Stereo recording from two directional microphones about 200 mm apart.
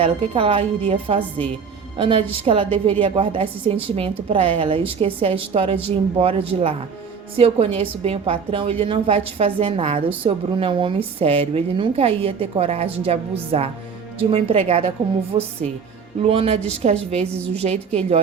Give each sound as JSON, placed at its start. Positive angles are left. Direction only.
{"t": 0.0, "sound": "a woman's voice", "side_deg": -25}